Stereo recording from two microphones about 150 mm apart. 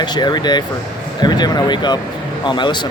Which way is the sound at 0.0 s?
30° left (ahead or behind).